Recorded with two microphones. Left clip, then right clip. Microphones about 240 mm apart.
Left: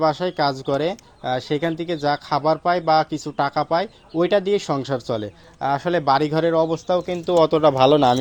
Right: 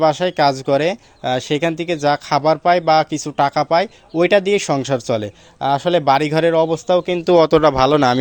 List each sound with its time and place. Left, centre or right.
0.0 s speech: right